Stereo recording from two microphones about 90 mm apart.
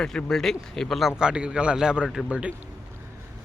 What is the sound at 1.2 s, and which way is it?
Speech, 10° right (ahead or behind).